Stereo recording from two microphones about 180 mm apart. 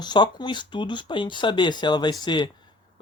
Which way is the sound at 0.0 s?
25° left (ahead or behind).